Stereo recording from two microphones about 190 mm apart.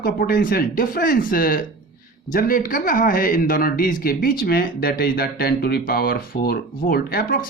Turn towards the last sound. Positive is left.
turn(degrees=50)  # may be behind; listen again after turning